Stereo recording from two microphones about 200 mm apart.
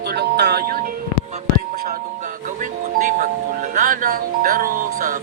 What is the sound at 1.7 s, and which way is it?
Music, 45° right (ahead or behind).